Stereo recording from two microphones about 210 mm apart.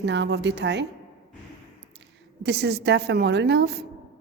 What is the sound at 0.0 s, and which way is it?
Speech, 60° right (ahead or behind).